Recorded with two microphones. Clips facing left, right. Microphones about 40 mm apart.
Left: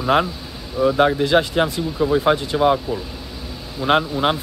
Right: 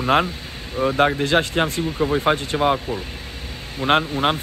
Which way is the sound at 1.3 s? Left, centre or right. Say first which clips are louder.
Left 2 dB; right.